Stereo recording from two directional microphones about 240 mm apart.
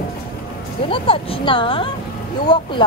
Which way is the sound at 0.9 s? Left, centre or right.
Left.